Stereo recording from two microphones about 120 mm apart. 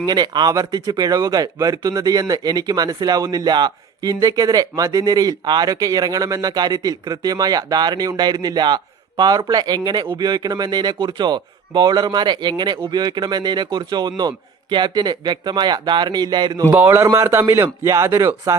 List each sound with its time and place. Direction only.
0.0 s speech: 35° right (ahead or behind)
16.7 s a man's voice: 15° right (ahead or behind)